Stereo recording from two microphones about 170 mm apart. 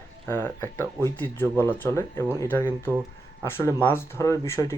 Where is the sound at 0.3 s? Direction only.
10° left (ahead or behind).